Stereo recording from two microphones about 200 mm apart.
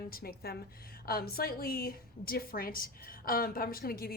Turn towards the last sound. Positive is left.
turn(degrees=50)  # may be behind; listen again after turning